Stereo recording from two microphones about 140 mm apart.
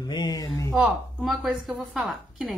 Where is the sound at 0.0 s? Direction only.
30° left (ahead or behind).